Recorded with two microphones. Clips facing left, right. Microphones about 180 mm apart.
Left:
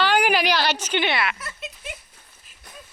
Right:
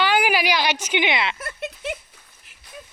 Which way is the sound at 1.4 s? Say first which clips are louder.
Right 6 dB; 55° right (ahead or behind).